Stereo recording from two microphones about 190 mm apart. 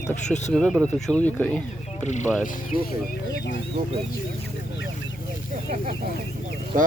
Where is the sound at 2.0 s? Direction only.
40° left (ahead or behind).